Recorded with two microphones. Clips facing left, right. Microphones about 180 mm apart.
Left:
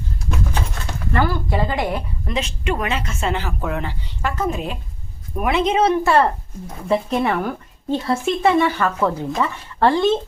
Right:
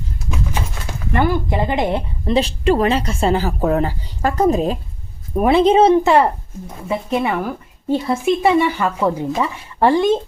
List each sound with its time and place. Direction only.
0.2 s a sound: 5° right (ahead or behind)
1.1 s a woman's voice: 20° right (ahead or behind)
6.8 s a woman's voice: 5° right (ahead or behind)